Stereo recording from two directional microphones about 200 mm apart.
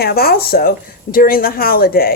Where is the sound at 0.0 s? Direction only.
50° left (ahead or behind).